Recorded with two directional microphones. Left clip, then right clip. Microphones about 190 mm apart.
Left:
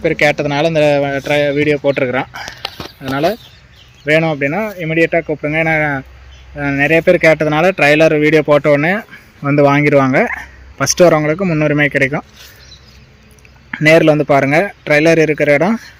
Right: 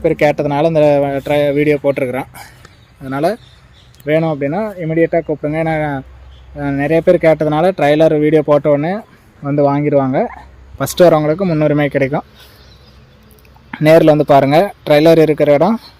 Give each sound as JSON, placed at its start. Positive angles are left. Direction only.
{"t": 0.0, "sound": "speech", "side_deg": -5}
{"t": 13.7, "sound": "speech", "side_deg": 0}